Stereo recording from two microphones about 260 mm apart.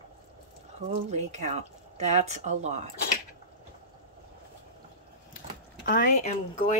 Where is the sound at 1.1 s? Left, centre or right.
Right.